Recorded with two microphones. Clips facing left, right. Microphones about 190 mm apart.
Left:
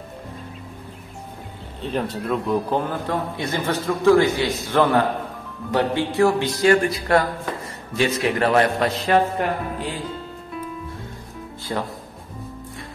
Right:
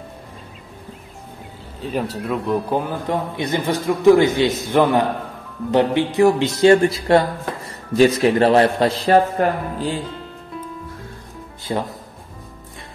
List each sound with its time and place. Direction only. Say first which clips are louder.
1.8 s a man's voice: right 1 dB; 5° right (ahead or behind); by 9.9 s 35° right (ahead or behind)
11.7 s speech: right 3 dB; 20° right (ahead or behind)